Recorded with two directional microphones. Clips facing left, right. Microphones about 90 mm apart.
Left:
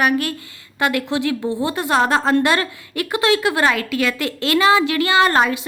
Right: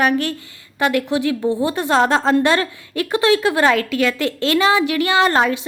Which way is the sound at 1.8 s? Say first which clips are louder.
Even; 30° right (ahead or behind).